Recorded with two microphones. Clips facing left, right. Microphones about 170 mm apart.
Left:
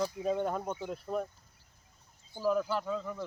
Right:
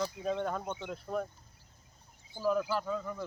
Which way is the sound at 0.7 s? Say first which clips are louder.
Left 2 dB; 35° left (ahead or behind).